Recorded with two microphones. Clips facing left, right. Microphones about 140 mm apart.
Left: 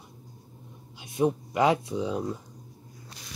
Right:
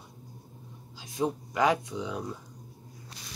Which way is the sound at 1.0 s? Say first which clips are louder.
Left 5 dB; 25° left (ahead or behind).